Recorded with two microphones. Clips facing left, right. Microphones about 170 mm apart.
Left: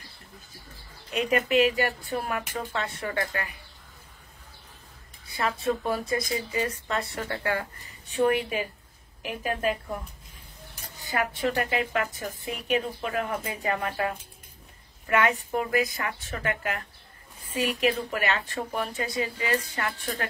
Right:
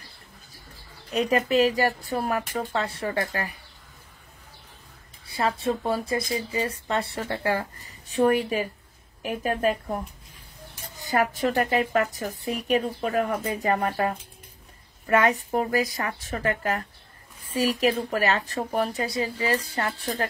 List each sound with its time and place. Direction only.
1.1 s speech: 35° right (ahead or behind)
5.2 s a woman's voice: 30° right (ahead or behind)
8.2 s a woman's voice: 40° right (ahead or behind)
11.0 s speech: 40° right (ahead or behind)